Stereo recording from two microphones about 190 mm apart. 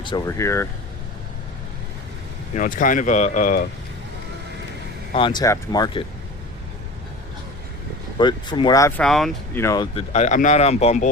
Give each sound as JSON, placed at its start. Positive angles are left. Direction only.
{"t": 0.3, "sound": "speech", "side_deg": 15}
{"t": 2.6, "sound": "speech", "side_deg": 45}
{"t": 5.1, "sound": "speech", "side_deg": 25}
{"t": 8.2, "sound": "speech", "side_deg": 25}
{"t": 9.0, "sound": "speech", "side_deg": 0}
{"t": 9.6, "sound": "speech", "side_deg": 20}
{"t": 10.1, "sound": "speech", "side_deg": 40}